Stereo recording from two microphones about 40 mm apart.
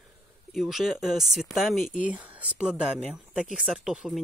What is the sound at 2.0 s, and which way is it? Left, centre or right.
Speech, right.